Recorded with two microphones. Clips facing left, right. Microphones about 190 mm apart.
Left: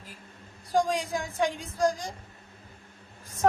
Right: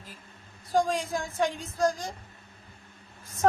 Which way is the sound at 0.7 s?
15° left (ahead or behind).